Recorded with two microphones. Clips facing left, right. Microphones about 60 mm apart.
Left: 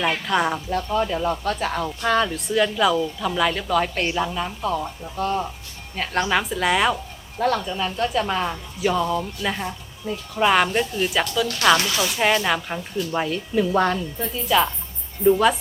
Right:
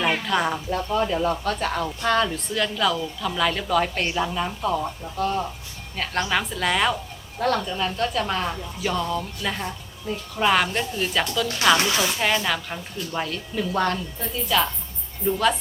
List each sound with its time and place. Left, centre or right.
0.0 s a woman's voice: centre
11.8 s speech: right
12.2 s speech: centre